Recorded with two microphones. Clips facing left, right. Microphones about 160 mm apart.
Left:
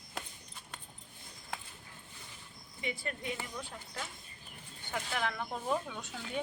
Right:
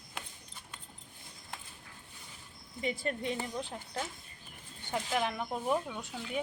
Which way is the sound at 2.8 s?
35° right (ahead or behind).